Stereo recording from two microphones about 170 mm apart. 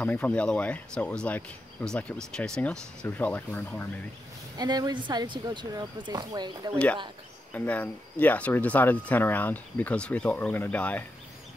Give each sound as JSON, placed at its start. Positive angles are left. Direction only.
{"t": 0.0, "sound": "speech", "side_deg": 10}
{"t": 4.6, "sound": "speech", "side_deg": -25}
{"t": 7.5, "sound": "speech", "side_deg": 10}